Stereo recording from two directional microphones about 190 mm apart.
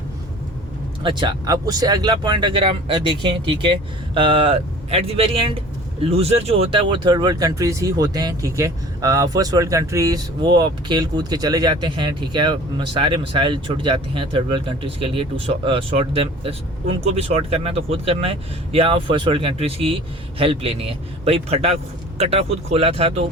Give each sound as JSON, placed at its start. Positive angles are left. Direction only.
{"t": 1.0, "sound": "speech", "side_deg": -25}